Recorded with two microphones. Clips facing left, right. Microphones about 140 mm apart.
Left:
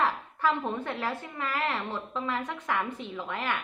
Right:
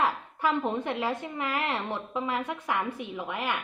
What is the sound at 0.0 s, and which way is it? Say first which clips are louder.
A woman's voice: even; 15° right (ahead or behind).